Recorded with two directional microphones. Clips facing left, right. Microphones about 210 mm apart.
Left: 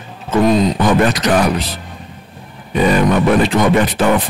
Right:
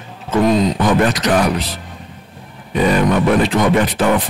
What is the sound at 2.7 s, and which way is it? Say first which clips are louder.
Speech: left 1 dB; 20° left (ahead or behind).